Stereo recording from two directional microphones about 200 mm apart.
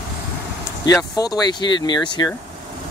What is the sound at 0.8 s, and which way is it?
Speech, 20° left (ahead or behind).